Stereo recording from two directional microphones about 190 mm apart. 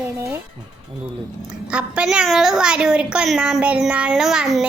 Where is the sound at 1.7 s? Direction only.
5° right (ahead or behind).